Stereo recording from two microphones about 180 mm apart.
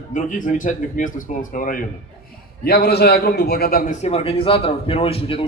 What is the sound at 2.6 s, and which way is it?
A man's voice, 60° left (ahead or behind).